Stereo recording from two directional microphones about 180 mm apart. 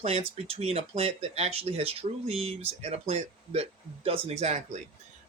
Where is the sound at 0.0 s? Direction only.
35° right (ahead or behind).